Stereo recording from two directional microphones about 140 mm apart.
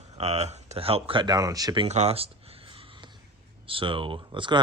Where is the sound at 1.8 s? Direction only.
50° right (ahead or behind).